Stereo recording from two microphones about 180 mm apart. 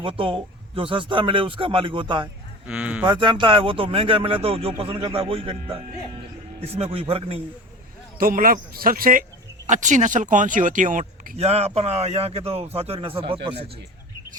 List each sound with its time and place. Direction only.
0.0 s a man's voice: 30° right (ahead or behind)
2.6 s speech: 5° right (ahead or behind)
3.1 s speech: 25° right (ahead or behind)
8.2 s a man's voice: 50° right (ahead or behind); by 13.5 s 30° right (ahead or behind)